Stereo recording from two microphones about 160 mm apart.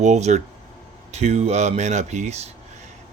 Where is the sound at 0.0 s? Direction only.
45° right (ahead or behind).